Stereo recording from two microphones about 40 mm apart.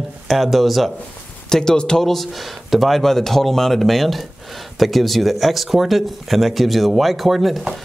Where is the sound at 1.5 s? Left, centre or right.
Centre.